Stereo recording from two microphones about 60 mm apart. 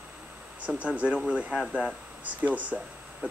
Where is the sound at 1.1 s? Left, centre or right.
Centre.